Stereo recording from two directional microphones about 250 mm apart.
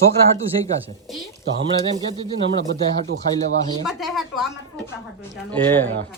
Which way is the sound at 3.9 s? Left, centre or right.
Centre.